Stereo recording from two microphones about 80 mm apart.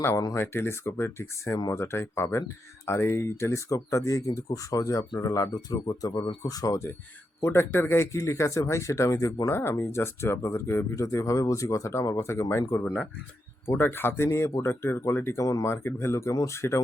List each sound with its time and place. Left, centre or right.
0.3 s speech: left
7.4 s speech: left
15.4 s speech: left
15.7 s speech: left